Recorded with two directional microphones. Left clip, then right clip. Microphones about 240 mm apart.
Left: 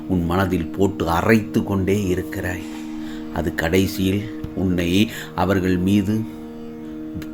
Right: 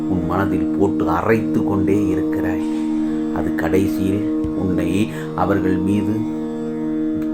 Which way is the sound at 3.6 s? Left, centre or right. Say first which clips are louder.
Even; left.